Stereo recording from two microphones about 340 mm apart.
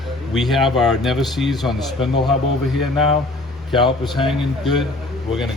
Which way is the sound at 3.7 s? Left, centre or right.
Centre.